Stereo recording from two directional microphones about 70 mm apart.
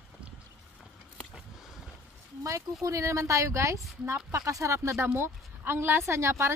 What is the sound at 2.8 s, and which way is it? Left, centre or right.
Speech, right.